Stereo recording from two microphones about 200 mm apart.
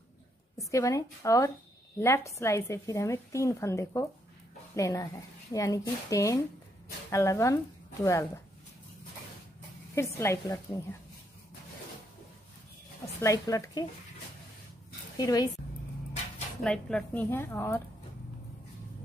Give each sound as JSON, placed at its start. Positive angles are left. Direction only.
{"t": 0.6, "sound": "a woman's voice", "side_deg": 15}
{"t": 10.1, "sound": "a woman's voice", "side_deg": 15}
{"t": 13.2, "sound": "a woman's voice", "side_deg": 15}
{"t": 15.1, "sound": "a woman's voice", "side_deg": 20}
{"t": 16.6, "sound": "a woman's voice", "side_deg": 5}